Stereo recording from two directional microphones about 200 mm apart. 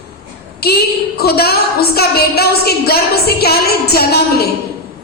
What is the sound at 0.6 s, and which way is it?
A woman's voice, 50° left (ahead or behind).